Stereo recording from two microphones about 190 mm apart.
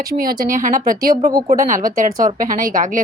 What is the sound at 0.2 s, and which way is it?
A woman's voice, 50° right (ahead or behind).